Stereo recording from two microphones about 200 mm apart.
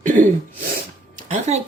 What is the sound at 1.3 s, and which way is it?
Speech, 35° right (ahead or behind).